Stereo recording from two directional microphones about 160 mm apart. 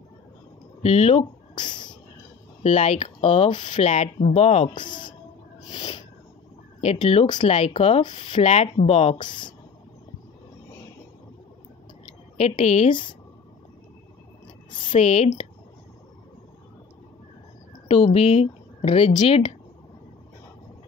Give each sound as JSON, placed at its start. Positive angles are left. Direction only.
{"t": 0.8, "sound": "speech", "side_deg": 40}
{"t": 1.5, "sound": "a sound", "side_deg": 25}
{"t": 2.6, "sound": "speech", "side_deg": 40}
{"t": 4.7, "sound": "speech", "side_deg": 30}
{"t": 5.7, "sound": "a sound", "side_deg": 30}
{"t": 6.8, "sound": "speech", "side_deg": 40}
{"t": 12.4, "sound": "speech", "side_deg": 40}
{"t": 14.9, "sound": "speech", "side_deg": 45}
{"t": 17.8, "sound": "speech", "side_deg": 40}